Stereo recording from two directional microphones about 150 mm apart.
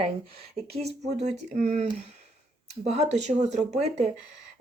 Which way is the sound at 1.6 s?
45° right (ahead or behind).